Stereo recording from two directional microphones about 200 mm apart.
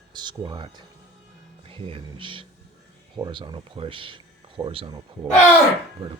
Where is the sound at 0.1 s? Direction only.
20° right (ahead or behind).